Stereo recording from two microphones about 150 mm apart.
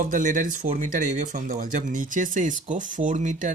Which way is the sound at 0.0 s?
60° right (ahead or behind).